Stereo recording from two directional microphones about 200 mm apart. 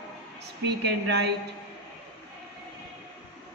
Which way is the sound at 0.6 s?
55° right (ahead or behind).